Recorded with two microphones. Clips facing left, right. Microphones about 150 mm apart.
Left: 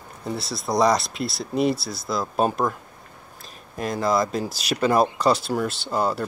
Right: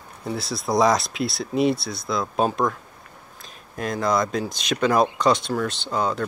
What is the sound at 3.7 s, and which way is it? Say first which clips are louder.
Speech: even; centre (ahead or behind).